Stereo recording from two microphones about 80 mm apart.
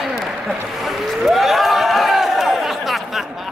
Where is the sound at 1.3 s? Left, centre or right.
Centre.